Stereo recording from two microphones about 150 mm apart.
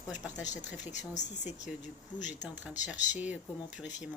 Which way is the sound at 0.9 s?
50° left (ahead or behind).